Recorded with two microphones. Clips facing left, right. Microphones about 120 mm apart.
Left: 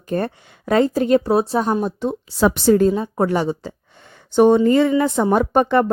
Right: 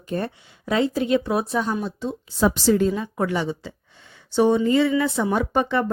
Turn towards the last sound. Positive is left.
turn(degrees=50)  # may be behind; listen again after turning